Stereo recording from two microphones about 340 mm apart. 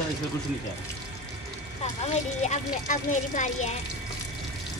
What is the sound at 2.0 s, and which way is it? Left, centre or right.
Speech, centre.